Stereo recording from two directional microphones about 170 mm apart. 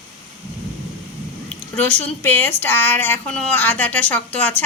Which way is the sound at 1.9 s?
10° left (ahead or behind).